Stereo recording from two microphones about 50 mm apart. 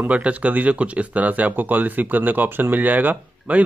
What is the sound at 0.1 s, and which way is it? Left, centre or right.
Speech, right.